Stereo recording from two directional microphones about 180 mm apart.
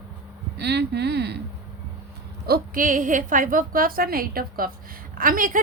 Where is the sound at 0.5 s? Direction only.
65° right (ahead or behind).